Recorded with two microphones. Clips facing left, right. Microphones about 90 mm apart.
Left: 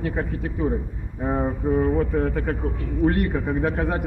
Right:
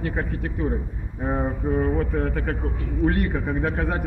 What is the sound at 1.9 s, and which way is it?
A man's voice, 10° left (ahead or behind).